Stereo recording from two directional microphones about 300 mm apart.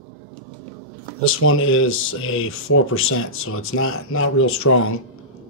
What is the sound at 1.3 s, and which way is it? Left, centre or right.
Speech, left.